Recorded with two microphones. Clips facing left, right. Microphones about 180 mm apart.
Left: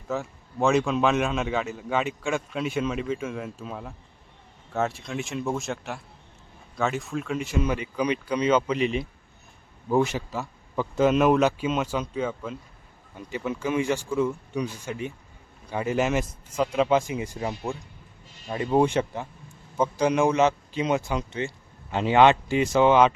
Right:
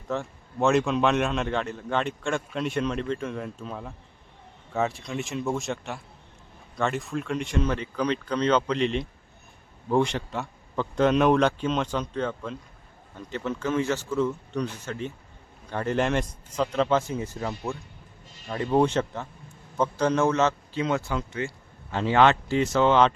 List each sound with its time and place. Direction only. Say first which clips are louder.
0.1 s a man's voice: even; centre (ahead or behind)